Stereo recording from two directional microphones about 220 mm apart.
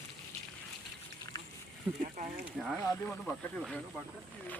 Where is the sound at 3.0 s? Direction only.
5° left (ahead or behind).